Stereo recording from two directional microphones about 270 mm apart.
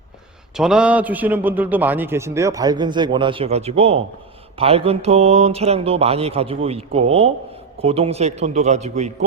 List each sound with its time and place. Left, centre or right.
0.5 s a man's voice: centre; by 9.1 s right